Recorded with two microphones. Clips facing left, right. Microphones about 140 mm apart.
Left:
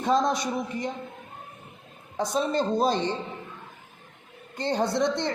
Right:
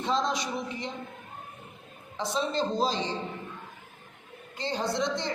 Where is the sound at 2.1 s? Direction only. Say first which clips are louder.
Left 4 dB; 45° left (ahead or behind).